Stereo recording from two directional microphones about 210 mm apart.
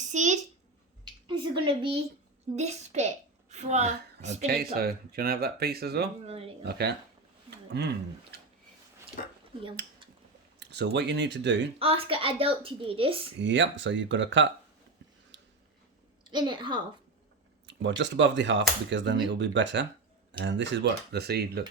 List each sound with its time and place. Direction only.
0.1 s a child's voice: 35° right (ahead or behind)
1.3 s a woman's voice: 25° right (ahead or behind)
4.4 s speech: 45° right (ahead or behind)
9.2 s speech: 40° left (ahead or behind)
10.6 s speech: 55° right (ahead or behind)
11.8 s a woman's voice: 25° right (ahead or behind)
13.4 s speech: 60° right (ahead or behind)
16.3 s a woman's voice: 20° right (ahead or behind)
17.7 s speech: 60° right (ahead or behind)